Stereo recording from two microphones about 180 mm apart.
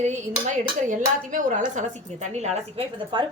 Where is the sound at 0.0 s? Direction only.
40° right (ahead or behind).